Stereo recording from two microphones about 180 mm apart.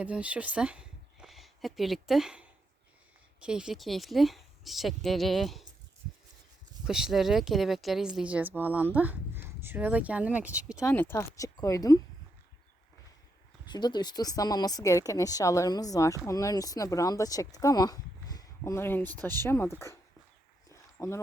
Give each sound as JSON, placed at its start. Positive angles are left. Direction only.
{"t": 0.0, "sound": "speech", "side_deg": -5}
{"t": 6.8, "sound": "speech", "side_deg": -5}
{"t": 10.8, "sound": "speech", "side_deg": 15}
{"t": 13.7, "sound": "speech", "side_deg": 25}
{"t": 20.7, "sound": "a sound", "side_deg": 15}